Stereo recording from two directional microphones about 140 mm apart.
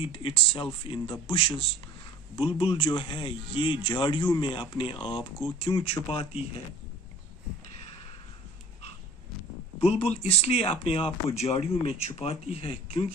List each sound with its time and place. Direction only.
0.1 s speech: 40° left (ahead or behind)
9.8 s speech: 45° left (ahead or behind)